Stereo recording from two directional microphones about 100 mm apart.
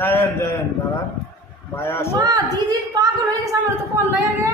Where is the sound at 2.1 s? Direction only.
40° right (ahead or behind).